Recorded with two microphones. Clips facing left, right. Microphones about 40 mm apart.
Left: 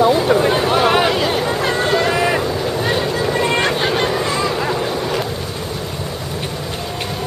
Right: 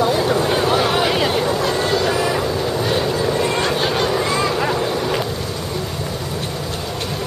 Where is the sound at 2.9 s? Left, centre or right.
Centre.